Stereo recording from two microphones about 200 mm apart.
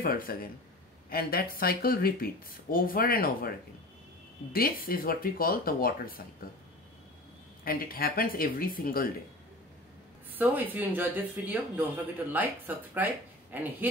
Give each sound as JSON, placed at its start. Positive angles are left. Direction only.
{"t": 0.0, "sound": "speech", "side_deg": 45}
{"t": 7.6, "sound": "speech", "side_deg": 45}
{"t": 10.3, "sound": "speech", "side_deg": -10}